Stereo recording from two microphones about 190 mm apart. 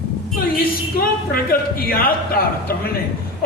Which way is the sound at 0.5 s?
50° left (ahead or behind).